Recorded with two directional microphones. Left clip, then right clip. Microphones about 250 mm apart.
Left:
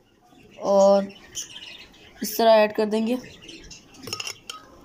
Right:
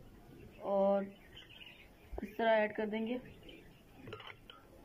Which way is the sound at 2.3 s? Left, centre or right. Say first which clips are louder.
Left 15 dB; centre.